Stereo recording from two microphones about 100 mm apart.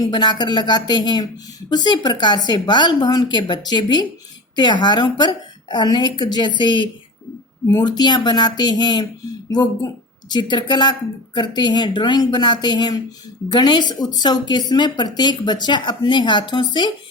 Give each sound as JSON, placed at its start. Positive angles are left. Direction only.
{"t": 0.0, "sound": "a woman's voice", "side_deg": 45}
{"t": 7.7, "sound": "a woman's voice", "side_deg": 40}